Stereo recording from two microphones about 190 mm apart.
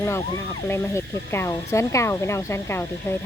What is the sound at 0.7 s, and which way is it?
Speech, 15° left (ahead or behind).